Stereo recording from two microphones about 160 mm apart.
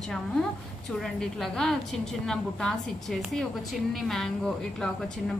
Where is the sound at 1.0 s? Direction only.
5° left (ahead or behind).